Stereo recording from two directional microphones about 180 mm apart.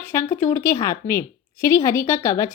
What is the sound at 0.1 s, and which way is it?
A woman's voice, 15° left (ahead or behind).